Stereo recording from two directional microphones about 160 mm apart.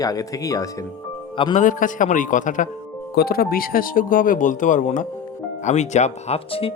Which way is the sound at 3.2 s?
70° left (ahead or behind).